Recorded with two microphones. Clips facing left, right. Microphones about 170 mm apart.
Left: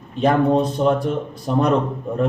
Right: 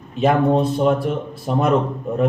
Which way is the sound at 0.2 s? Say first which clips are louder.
Even; 5° right (ahead or behind).